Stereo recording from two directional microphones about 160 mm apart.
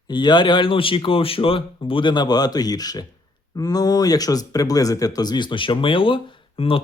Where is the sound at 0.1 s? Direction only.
30° left (ahead or behind).